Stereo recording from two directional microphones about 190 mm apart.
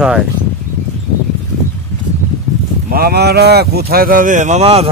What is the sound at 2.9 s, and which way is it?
Speech, 55° right (ahead or behind).